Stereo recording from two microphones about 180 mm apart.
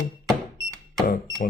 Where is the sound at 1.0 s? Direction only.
50° left (ahead or behind).